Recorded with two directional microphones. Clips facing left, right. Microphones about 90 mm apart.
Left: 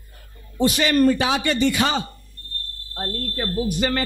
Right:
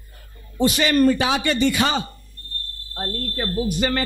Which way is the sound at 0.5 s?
15° right (ahead or behind).